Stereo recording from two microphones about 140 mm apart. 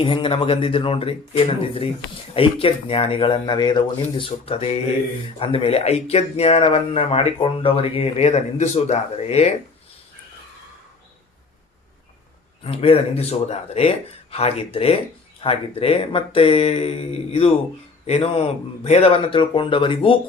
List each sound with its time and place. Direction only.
0.0 s speech: 35° left (ahead or behind)
12.6 s speech: 45° left (ahead or behind)